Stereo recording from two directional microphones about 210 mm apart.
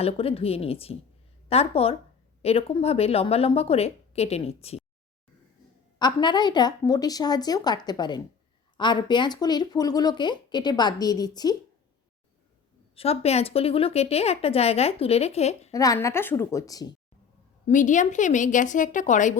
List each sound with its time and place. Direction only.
0.0 s speech: 25° left (ahead or behind)
6.0 s speech: 20° left (ahead or behind)
13.0 s speech: 30° left (ahead or behind)
15.7 s a woman's voice: 15° left (ahead or behind)
17.7 s a woman's voice: 35° left (ahead or behind)